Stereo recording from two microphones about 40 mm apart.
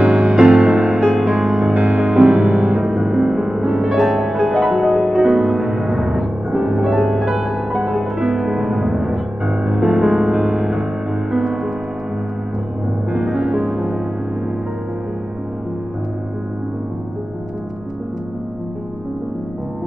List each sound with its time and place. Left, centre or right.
0.0 s music: centre
2.8 s music: centre; by 5.9 s right
5.9 s music: centre
9.5 s music: right
9.8 s music: right
13.1 s music: centre